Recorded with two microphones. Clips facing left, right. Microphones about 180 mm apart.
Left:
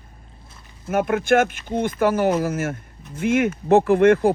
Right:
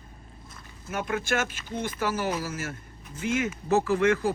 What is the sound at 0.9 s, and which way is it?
Speech, 55° left (ahead or behind).